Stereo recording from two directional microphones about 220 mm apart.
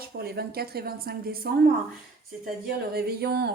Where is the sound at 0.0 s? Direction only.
45° right (ahead or behind).